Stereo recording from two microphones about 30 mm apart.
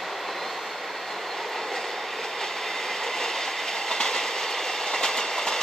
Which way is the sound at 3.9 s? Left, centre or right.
Centre.